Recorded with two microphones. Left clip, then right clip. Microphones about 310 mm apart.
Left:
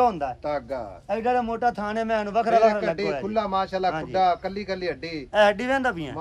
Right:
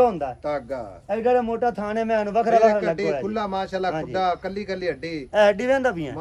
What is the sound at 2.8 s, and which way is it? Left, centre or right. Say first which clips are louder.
A man's voice: right 2 dB; left.